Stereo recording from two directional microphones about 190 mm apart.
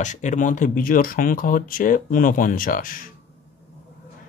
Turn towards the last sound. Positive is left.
turn(degrees=45)  # may be behind; listen again after turning